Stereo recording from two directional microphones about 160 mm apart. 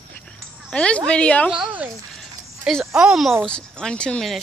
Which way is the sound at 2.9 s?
5° right (ahead or behind).